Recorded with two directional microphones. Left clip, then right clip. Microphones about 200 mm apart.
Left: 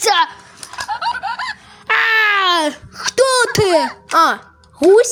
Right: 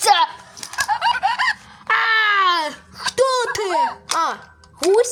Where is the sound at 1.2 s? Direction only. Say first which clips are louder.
Right 4 dB; 15° right (ahead or behind).